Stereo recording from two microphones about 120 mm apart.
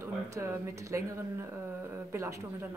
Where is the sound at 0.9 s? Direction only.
25° right (ahead or behind).